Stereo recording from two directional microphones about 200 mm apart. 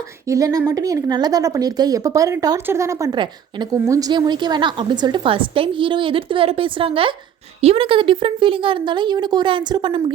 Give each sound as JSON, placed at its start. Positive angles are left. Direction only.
{"t": 0.3, "sound": "speech", "side_deg": -15}